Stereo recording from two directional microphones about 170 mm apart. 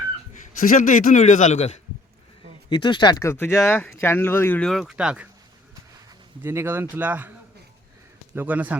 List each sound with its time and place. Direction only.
0.6 s a man's voice: 50° left (ahead or behind)
2.6 s speech: 30° left (ahead or behind); by 5.3 s 5° right (ahead or behind)
6.4 s speech: 15° right (ahead or behind)
8.4 s speech: 10° right (ahead or behind)